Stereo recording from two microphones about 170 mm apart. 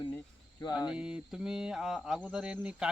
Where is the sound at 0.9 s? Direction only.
5° right (ahead or behind).